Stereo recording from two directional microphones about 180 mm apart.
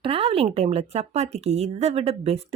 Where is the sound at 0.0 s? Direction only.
30° right (ahead or behind).